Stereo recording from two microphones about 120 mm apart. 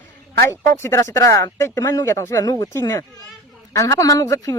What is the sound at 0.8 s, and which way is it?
Speech, 20° left (ahead or behind).